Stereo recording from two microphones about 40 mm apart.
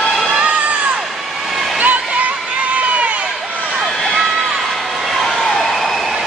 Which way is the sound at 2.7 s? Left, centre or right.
Right.